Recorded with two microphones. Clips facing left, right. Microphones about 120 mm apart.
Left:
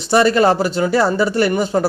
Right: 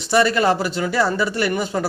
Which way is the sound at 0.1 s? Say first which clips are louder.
Left 4 dB; 30° left (ahead or behind).